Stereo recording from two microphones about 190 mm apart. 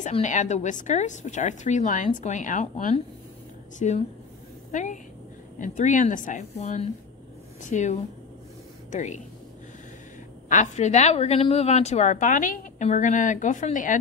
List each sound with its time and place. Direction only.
0.0 s a woman's voice: 40° left (ahead or behind)
5.6 s a woman's voice: 40° left (ahead or behind)
10.5 s a woman's voice: 40° left (ahead or behind)